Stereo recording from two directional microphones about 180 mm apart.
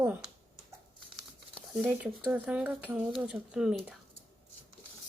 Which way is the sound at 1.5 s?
10° right (ahead or behind).